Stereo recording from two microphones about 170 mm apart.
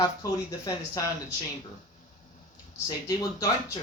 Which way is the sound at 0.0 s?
20° left (ahead or behind).